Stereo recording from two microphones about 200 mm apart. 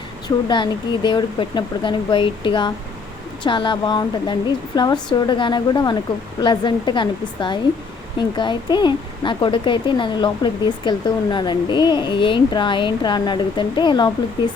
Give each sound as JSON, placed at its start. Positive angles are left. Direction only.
{"t": 0.3, "sound": "speech", "side_deg": 20}